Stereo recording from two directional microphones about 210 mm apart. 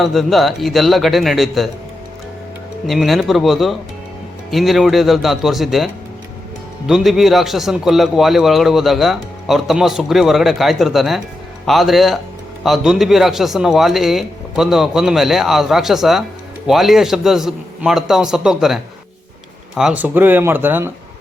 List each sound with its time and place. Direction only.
0.0 s speech: centre (ahead or behind)
2.8 s speech: centre (ahead or behind)